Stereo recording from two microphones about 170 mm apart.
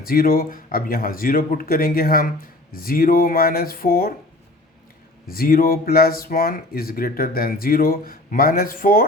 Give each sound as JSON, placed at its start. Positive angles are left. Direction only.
{"t": 0.0, "sound": "speech", "side_deg": 60}
{"t": 5.2, "sound": "speech", "side_deg": 60}